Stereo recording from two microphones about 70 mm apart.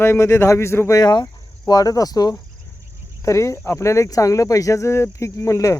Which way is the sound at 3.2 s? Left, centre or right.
Left.